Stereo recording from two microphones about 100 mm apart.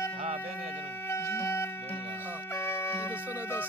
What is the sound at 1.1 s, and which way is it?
Music, 25° left (ahead or behind).